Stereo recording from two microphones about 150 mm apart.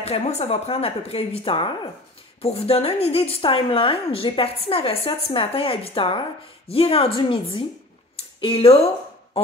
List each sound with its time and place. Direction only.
0.0 s a woman's voice: 45° left (ahead or behind)